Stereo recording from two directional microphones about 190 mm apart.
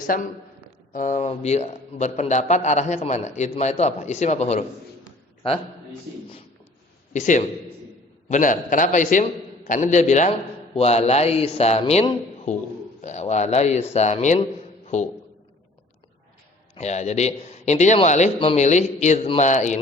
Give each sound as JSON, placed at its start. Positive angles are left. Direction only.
{"t": 0.1, "sound": "a man's voice", "side_deg": 45}
{"t": 7.1, "sound": "a man's voice", "side_deg": 40}
{"t": 16.7, "sound": "a man's voice", "side_deg": 35}